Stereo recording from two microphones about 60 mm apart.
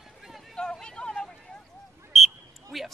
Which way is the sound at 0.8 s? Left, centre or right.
Centre.